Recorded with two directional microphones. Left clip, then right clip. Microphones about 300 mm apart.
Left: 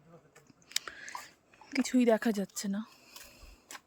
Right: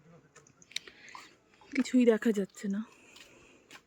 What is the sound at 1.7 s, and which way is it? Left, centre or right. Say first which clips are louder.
Speech: right 1 dB; centre.